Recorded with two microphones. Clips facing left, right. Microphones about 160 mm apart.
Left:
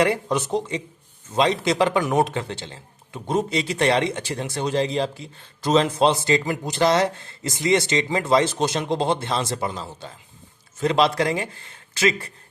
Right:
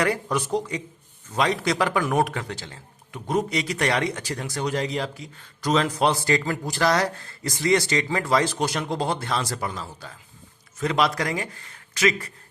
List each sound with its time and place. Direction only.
0.0 s speech: 25° left (ahead or behind)